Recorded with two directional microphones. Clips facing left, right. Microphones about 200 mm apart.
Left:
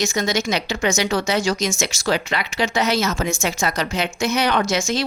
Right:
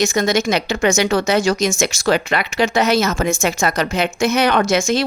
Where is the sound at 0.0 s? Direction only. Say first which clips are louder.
Right 5 dB; 55° right (ahead or behind).